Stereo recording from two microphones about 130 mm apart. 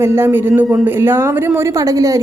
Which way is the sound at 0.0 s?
20° right (ahead or behind).